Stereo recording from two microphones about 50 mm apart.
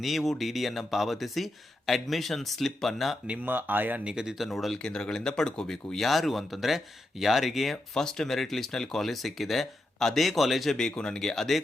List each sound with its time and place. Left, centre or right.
0.0 s speech: centre
3.3 s speech: right
4.0 s speech: centre
4.4 s speech: centre
4.8 s speech: centre
7.9 s speech: centre
10.8 s speech: centre